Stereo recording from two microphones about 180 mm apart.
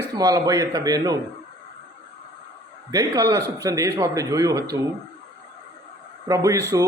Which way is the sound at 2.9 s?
20° right (ahead or behind).